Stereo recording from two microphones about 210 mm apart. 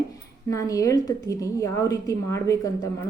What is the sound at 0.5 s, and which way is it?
Speech, 15° left (ahead or behind).